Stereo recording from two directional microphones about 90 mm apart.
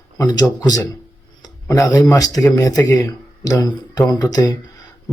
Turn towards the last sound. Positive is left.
turn(degrees=45)  # may be behind; listen again after turning